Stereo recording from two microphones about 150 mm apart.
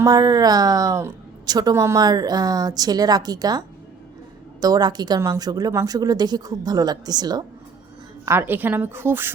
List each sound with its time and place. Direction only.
0.0 s a woman's voice: 25° right (ahead or behind)
4.6 s a woman's voice: 25° right (ahead or behind)
8.2 s a woman's voice: 15° right (ahead or behind)